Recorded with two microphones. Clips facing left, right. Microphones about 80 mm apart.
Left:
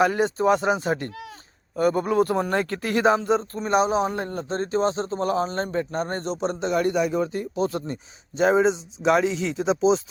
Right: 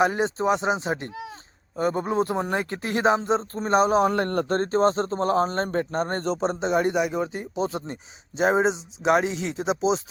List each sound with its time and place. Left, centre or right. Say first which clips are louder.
0.0 s speech: left 2 dB; right
3.6 s speech: right 4 dB; right
4.1 s speech: right 5 dB; right
4.5 s speech: right 1 dB; right
6.5 s speech: left 2 dB; right